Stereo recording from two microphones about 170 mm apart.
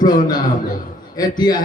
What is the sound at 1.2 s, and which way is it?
Speech, 25° left (ahead or behind).